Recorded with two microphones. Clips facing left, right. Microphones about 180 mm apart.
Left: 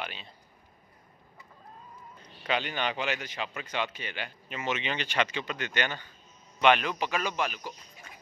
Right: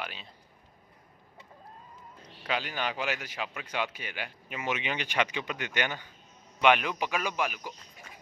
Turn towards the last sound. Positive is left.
turn(degrees=-10)  # may be behind; listen again after turning